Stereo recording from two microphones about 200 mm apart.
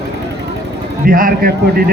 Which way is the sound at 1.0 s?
45° right (ahead or behind).